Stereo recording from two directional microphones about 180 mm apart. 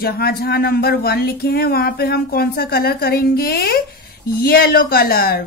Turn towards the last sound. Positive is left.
turn(degrees=55)  # may be behind; listen again after turning